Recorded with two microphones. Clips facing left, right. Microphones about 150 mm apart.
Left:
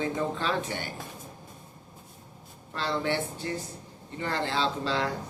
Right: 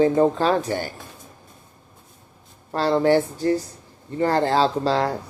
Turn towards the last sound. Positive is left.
turn(degrees=-40)  # may be behind; listen again after turning